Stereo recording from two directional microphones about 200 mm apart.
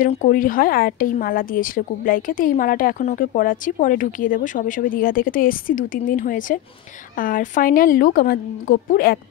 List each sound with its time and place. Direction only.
0.1 s a woman's voice: 40° left (ahead or behind)